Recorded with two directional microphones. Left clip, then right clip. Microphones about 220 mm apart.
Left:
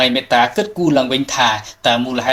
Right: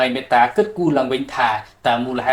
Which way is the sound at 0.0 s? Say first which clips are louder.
Left 2 dB; 35° left (ahead or behind).